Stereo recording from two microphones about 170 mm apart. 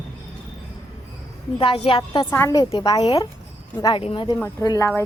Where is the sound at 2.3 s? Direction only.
15° left (ahead or behind).